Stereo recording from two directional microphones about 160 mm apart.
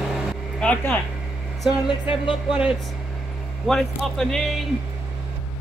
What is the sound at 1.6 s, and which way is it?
Speech, 25° left (ahead or behind).